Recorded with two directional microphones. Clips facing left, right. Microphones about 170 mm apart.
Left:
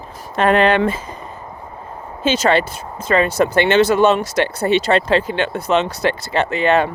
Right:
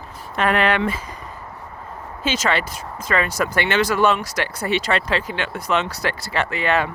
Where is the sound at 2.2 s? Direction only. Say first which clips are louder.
Left 6 dB; 30° left (ahead or behind).